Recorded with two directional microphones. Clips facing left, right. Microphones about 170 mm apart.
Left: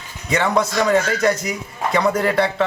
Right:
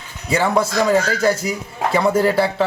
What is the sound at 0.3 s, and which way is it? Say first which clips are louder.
Speech: right 1 dB; 5° right (ahead or behind).